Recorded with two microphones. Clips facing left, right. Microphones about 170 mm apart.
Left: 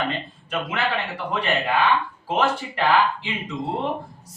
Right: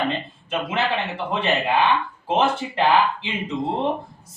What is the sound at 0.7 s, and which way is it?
Speech, 25° right (ahead or behind).